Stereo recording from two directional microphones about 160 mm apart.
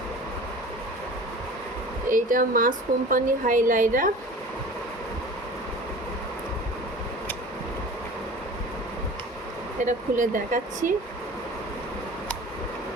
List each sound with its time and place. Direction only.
2.0 s speech: 60° right (ahead or behind)
9.8 s speech: 55° right (ahead or behind)